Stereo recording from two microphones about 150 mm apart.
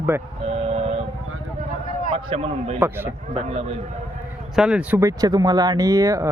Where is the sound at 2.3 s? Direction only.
40° right (ahead or behind).